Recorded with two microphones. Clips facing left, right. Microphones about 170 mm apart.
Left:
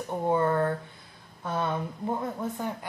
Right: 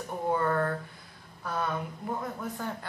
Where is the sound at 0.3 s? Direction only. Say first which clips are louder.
Left 3 dB; 25° left (ahead or behind).